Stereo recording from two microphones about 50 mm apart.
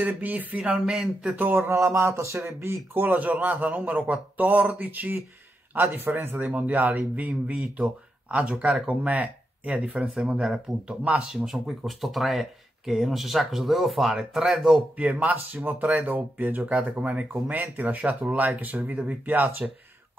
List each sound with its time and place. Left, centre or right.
0.0 s a man's voice: right
0.6 s speech: right
1.3 s a man's voice: right
1.6 s a sound: right
2.9 s a man's voice: right
5.8 s a man's voice: right
10.4 s speech: centre
15.0 s a man's voice: right